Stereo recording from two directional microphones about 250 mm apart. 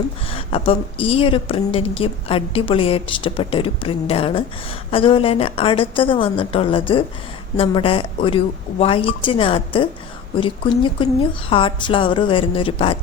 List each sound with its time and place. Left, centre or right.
0.3 s a woman's voice: left